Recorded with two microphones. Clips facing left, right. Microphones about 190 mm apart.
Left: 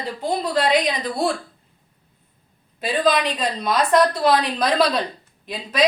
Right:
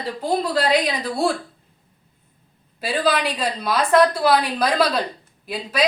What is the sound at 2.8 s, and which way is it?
A woman's voice, 5° right (ahead or behind).